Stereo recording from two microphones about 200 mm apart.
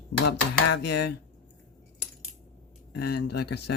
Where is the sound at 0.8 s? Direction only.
55° left (ahead or behind).